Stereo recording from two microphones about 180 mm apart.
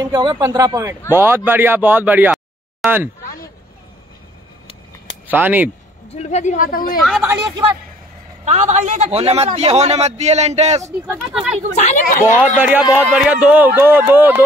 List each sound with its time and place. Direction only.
0.0 s speech: 25° right (ahead or behind); by 3.1 s 5° right (ahead or behind)
5.3 s speech: 10° right (ahead or behind)
6.1 s speech: 40° left (ahead or behind)
7.0 s speech: centre (ahead or behind)
8.5 s a man's voice: 40° right (ahead or behind)
11.2 s speech: centre (ahead or behind)
11.7 s speech: 40° left (ahead or behind)
12.5 s speech: 10° right (ahead or behind)